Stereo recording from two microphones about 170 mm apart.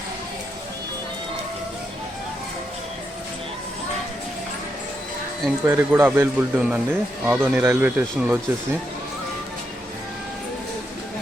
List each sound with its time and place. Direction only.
5.6 s speech: 15° right (ahead or behind)